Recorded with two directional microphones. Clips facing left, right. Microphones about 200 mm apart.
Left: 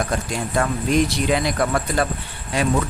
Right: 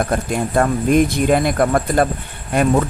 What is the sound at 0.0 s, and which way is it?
Speech, 55° right (ahead or behind).